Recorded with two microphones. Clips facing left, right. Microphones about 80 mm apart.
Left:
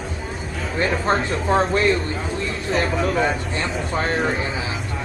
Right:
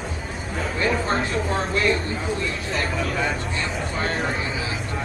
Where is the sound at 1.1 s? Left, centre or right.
Left.